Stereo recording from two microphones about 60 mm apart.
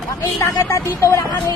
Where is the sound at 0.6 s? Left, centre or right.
Left.